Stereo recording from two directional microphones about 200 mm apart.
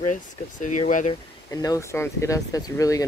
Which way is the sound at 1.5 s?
15° left (ahead or behind).